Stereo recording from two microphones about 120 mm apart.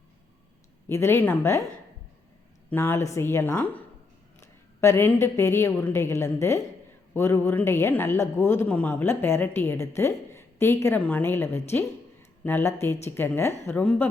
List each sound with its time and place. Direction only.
0.9 s a woman's voice: 20° left (ahead or behind)
2.6 s a woman's voice: 15° left (ahead or behind)